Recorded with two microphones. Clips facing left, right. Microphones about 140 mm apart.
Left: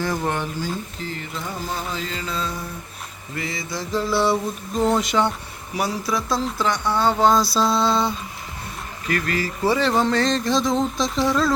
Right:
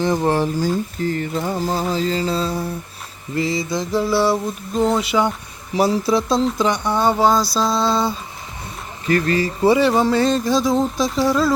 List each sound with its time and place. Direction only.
0.3 s speech: 35° right (ahead or behind); by 4.0 s 20° right (ahead or behind)
4.0 s speech: 5° right (ahead or behind)
5.7 s speech: 30° right (ahead or behind)
7.3 s speech: centre (ahead or behind)
9.0 s speech: 30° right (ahead or behind)
9.6 s speech: 10° right (ahead or behind)